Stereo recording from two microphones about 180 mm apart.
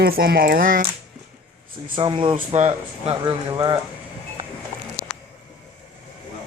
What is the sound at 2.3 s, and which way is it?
Speech, 40° right (ahead or behind).